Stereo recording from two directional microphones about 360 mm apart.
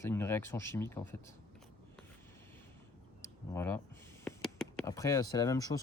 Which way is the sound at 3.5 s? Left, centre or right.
Centre.